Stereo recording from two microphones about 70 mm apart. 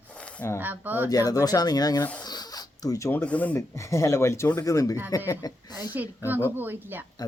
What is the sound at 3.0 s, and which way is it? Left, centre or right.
Speech, left.